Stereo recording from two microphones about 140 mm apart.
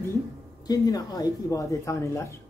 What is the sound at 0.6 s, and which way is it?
Speech, 25° left (ahead or behind).